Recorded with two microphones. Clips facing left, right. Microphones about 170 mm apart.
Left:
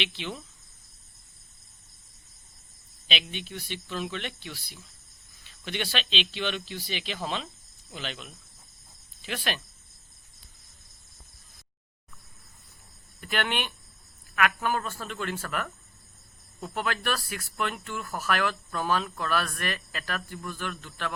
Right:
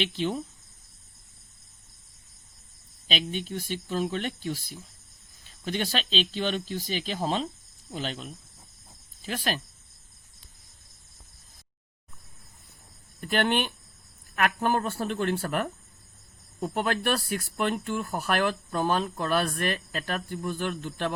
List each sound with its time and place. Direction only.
0.0 s speech: 40° right (ahead or behind)
3.1 s speech: 40° right (ahead or behind)
13.2 s speech: 40° right (ahead or behind)
17.6 s speech: 40° right (ahead or behind)